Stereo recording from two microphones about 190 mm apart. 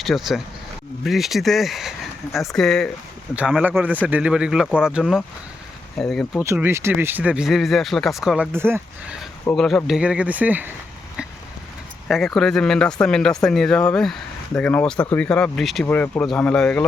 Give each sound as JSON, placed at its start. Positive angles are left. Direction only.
{"t": 0.0, "sound": "speech", "side_deg": 0}
{"t": 6.4, "sound": "speech", "side_deg": -15}
{"t": 8.5, "sound": "speech", "side_deg": -10}
{"t": 9.6, "sound": "speech", "side_deg": 0}
{"t": 12.0, "sound": "speech", "side_deg": 0}